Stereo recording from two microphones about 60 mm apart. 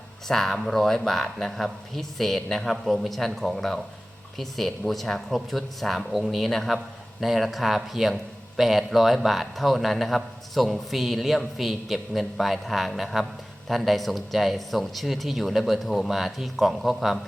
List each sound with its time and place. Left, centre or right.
0.3 s a man's voice: centre